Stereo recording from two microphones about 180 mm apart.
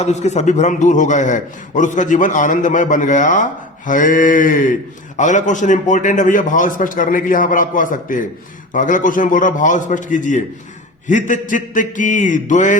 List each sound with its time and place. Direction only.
0.0 s a man's voice: 40° left (ahead or behind)